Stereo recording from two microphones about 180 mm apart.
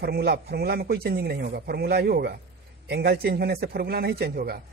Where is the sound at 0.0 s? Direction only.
60° right (ahead or behind).